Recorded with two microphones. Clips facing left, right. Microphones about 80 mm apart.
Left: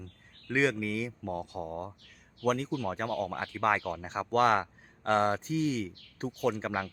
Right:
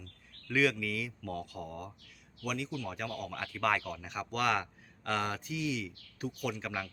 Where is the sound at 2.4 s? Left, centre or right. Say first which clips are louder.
Left 7 dB; left.